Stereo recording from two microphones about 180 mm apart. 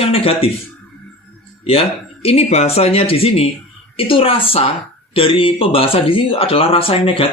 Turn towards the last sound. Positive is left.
turn(degrees=30)  # may be behind; listen again after turning